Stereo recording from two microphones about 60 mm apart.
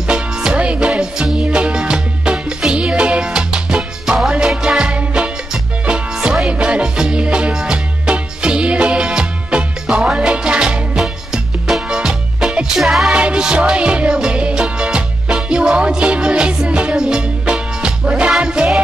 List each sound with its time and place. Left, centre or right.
0.1 s music: centre
11.0 s music: centre
13.1 s music: centre